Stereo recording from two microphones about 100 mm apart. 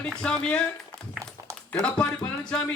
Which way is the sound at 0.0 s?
10° left (ahead or behind).